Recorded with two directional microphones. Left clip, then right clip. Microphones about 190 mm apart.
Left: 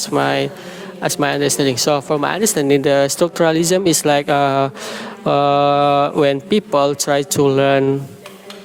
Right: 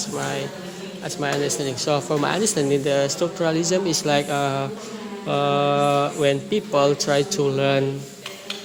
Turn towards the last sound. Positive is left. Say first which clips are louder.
# left 7 dB
turn(degrees=25)  # may be behind; listen again after turning